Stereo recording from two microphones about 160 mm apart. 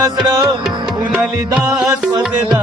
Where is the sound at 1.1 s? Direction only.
5° right (ahead or behind).